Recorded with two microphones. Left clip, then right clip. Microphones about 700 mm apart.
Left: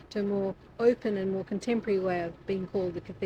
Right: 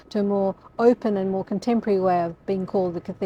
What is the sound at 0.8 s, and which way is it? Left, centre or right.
Speech, right.